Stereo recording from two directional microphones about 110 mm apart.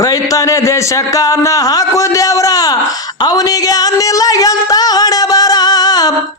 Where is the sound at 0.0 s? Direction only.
30° left (ahead or behind).